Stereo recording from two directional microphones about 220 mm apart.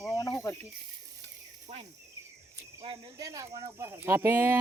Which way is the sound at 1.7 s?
30° right (ahead or behind).